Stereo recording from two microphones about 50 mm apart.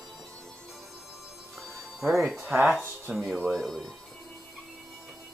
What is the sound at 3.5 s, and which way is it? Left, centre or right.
Speech, centre.